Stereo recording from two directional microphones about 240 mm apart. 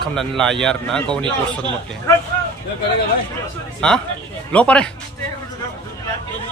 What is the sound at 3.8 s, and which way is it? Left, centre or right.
A man's voice, centre.